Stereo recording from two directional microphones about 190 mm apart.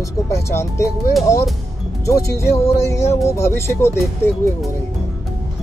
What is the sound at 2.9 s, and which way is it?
Speech, 15° left (ahead or behind).